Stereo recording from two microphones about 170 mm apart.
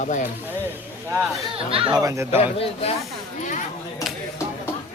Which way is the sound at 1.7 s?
20° right (ahead or behind).